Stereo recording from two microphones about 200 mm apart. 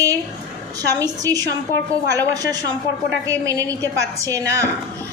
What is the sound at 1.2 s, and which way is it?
A woman's voice, 20° right (ahead or behind).